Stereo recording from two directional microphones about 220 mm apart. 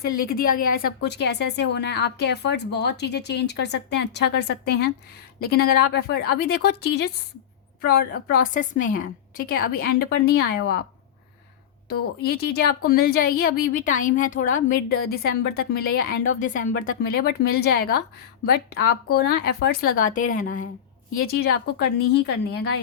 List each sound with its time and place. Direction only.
0.0 s a woman's voice: 40° left (ahead or behind)
12.2 s a woman's voice: 45° left (ahead or behind)